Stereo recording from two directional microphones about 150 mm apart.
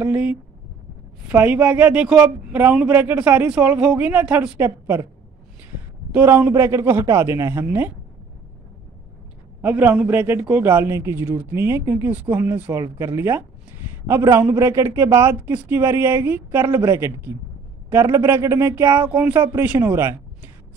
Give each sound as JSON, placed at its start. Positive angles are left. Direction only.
{"t": 0.0, "sound": "a sound", "side_deg": -10}
{"t": 1.3, "sound": "a man's voice", "side_deg": -10}
{"t": 6.1, "sound": "a man's voice", "side_deg": -15}
{"t": 9.6, "sound": "a man's voice", "side_deg": -10}